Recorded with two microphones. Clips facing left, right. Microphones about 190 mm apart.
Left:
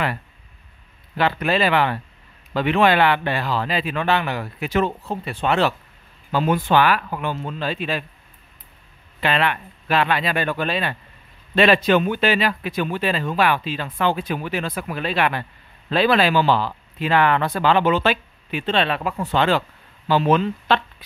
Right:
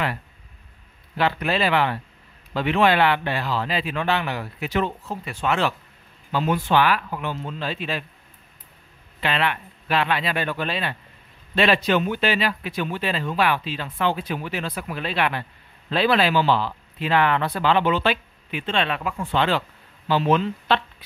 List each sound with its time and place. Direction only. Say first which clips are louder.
1.1 s speech: left 2 dB; 60° left (ahead or behind)
5.0 s speech: left 3 dB; 30° left (ahead or behind)
6.3 s speech: left 2 dB; 50° left (ahead or behind)
9.2 s speech: left 3 dB; 50° left (ahead or behind)